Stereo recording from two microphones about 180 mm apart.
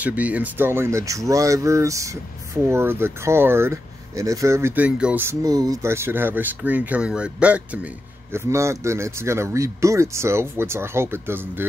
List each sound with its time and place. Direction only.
0.0 s speech: 10° right (ahead or behind)